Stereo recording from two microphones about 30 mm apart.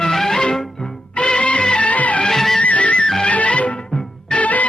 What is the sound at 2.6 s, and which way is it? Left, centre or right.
Music, left.